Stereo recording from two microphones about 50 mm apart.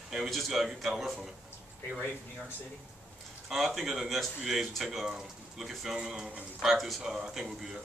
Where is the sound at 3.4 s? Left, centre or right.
Centre.